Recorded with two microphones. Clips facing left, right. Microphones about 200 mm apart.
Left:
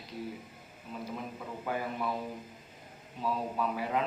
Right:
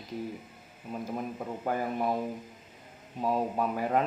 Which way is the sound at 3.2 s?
45° right (ahead or behind).